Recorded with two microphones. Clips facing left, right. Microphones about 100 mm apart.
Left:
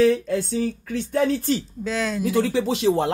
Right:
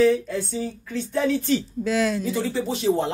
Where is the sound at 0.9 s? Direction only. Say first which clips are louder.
Left 1 dB; 45° left (ahead or behind).